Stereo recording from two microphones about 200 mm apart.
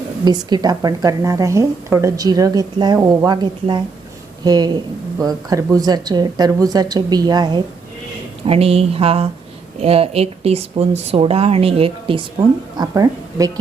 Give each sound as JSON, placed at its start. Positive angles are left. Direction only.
{"t": 0.3, "sound": "a woman's voice", "side_deg": -20}